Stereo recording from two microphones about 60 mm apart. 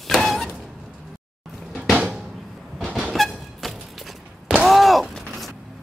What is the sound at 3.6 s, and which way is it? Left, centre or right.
Music, centre.